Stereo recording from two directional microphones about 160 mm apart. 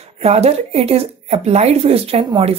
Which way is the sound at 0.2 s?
40° right (ahead or behind).